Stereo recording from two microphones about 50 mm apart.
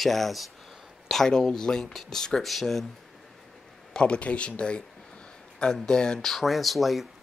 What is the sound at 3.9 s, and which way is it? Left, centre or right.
Speech, left.